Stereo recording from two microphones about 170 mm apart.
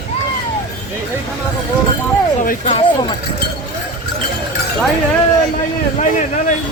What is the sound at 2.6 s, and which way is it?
Speech, 35° left (ahead or behind).